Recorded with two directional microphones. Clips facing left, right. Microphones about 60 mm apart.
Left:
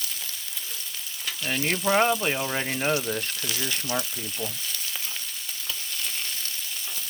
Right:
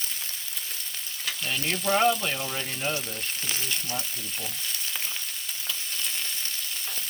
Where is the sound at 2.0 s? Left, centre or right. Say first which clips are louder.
Left 1 dB; left.